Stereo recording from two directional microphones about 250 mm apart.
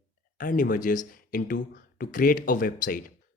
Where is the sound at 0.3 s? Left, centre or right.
Left.